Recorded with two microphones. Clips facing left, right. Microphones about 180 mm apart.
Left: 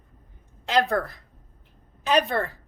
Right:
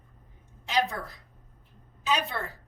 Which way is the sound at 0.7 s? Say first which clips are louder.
Left 6 dB; 65° left (ahead or behind).